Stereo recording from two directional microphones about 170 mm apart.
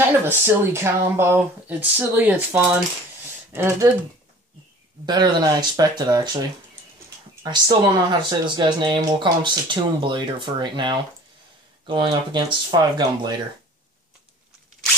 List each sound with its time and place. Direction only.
0.0 s speech: 15° right (ahead or behind)
5.0 s speech: 25° right (ahead or behind)
7.4 s speech: 25° right (ahead or behind)